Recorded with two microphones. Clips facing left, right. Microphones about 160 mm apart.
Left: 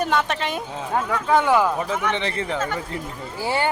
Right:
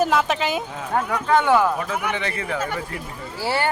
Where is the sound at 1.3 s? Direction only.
10° left (ahead or behind).